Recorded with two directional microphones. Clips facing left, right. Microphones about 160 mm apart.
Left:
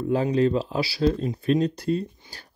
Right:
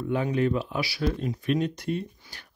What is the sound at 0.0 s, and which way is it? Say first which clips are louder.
Speech: left 4 dB; 35° left (ahead or behind).